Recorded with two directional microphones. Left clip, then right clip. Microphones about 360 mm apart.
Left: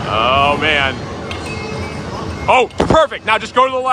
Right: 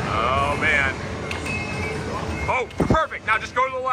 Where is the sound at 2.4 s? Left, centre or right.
Centre.